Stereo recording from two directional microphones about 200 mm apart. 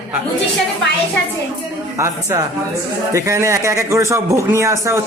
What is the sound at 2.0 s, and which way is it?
Speech, 15° right (ahead or behind).